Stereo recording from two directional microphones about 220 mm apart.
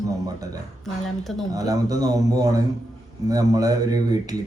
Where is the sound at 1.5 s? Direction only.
15° right (ahead or behind).